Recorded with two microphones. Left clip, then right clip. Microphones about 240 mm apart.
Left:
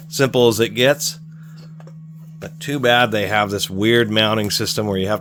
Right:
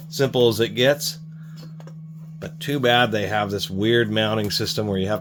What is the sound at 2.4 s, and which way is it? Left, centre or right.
Speech, centre.